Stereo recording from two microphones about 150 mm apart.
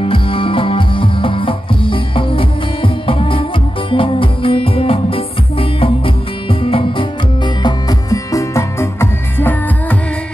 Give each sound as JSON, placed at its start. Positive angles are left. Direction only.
{"t": 0.0, "sound": "music", "side_deg": 35}